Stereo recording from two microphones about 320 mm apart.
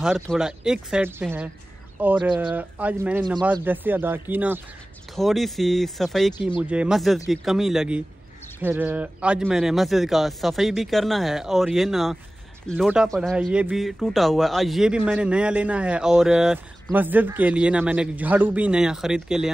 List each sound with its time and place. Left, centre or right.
0.0 s speech: centre